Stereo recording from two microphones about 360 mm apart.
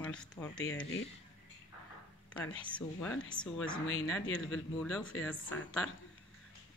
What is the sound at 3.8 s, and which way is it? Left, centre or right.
Speech, left.